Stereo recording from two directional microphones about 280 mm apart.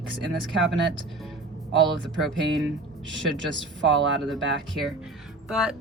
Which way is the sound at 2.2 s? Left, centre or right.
Centre.